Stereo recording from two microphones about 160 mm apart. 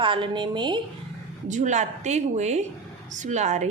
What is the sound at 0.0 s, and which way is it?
Speech, 30° right (ahead or behind).